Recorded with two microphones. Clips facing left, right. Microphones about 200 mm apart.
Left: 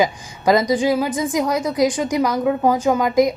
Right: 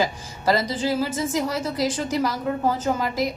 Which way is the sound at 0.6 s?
15° left (ahead or behind).